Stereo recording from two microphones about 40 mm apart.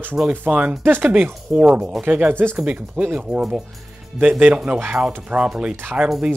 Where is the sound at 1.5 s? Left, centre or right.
Right.